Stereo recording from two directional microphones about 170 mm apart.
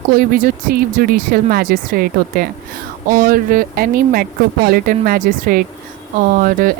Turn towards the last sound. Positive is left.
turn(degrees=-55)  # may be behind; listen again after turning